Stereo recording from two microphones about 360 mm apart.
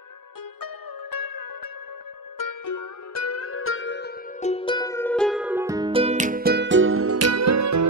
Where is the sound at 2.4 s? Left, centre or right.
Left.